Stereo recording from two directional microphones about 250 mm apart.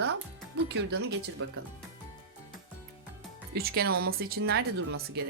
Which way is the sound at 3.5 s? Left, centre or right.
Right.